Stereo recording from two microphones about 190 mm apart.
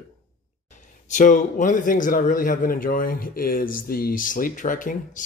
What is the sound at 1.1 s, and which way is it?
A man's voice, 45° left (ahead or behind).